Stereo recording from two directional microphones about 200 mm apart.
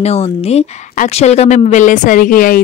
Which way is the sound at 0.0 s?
30° left (ahead or behind).